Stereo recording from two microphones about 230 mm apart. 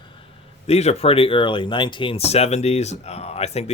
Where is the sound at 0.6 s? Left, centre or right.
Left.